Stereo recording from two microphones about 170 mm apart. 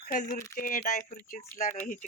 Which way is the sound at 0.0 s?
50° left (ahead or behind).